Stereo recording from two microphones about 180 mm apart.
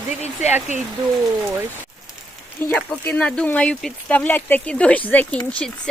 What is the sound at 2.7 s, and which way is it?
Speech, 10° left (ahead or behind).